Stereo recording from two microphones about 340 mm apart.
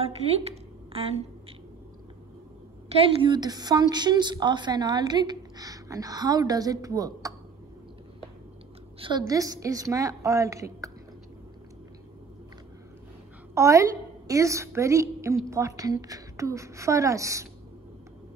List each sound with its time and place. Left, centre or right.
0.0 s a sound: centre
2.9 s a woman's voice: centre
9.0 s a woman's voice: centre
13.6 s a woman's voice: centre